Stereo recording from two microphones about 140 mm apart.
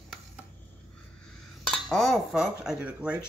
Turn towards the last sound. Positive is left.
turn(degrees=-10)  # may be behind; listen again after turning